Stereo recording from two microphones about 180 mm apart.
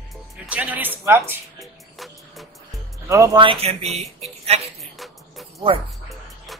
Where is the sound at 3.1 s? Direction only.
20° right (ahead or behind).